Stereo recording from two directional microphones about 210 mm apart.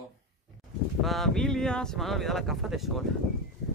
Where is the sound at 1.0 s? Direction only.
Centre (ahead or behind).